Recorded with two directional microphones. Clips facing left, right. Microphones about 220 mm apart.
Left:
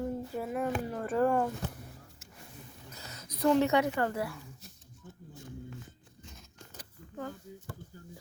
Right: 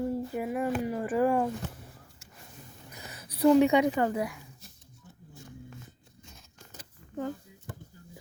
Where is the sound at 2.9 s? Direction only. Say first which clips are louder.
Right 3 dB; 15° right (ahead or behind).